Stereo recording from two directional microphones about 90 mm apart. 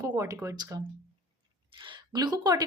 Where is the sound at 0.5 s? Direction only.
50° right (ahead or behind).